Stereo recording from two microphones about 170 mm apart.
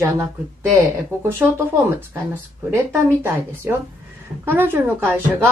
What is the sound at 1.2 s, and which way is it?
Speech, 15° right (ahead or behind).